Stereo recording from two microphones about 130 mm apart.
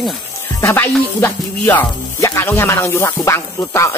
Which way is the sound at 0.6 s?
20° left (ahead or behind).